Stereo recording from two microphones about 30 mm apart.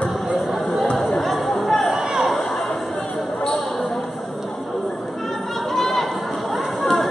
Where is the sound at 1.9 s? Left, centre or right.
Centre.